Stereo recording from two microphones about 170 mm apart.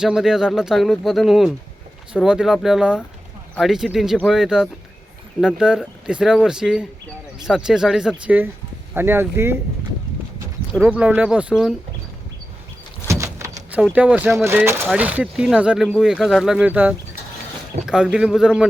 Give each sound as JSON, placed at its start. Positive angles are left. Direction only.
{"t": 0.0, "sound": "speech", "side_deg": -5}
{"t": 10.8, "sound": "speech", "side_deg": -10}
{"t": 13.1, "sound": "keys jangling", "side_deg": -15}
{"t": 13.8, "sound": "speech", "side_deg": -5}